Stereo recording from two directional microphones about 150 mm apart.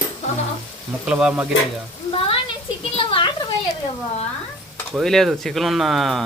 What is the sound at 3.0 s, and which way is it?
Speech, 35° left (ahead or behind).